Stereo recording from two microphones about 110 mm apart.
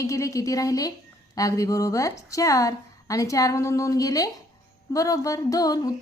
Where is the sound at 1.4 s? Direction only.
30° left (ahead or behind).